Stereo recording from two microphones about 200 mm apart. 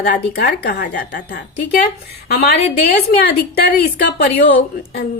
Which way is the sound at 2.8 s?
50° left (ahead or behind).